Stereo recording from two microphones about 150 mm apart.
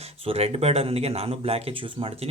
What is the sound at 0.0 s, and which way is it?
Speech, 45° right (ahead or behind).